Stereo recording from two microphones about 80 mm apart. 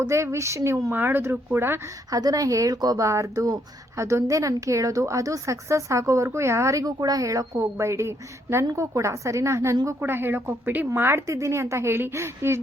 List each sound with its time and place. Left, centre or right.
0.1 s speech: right
2.0 s speech: right